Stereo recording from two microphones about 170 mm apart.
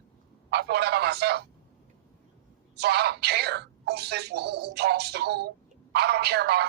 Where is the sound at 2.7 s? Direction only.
75° right (ahead or behind).